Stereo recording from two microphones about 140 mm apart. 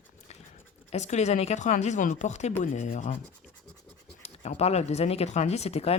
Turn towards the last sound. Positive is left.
turn(degrees=45)  # may be behind; listen again after turning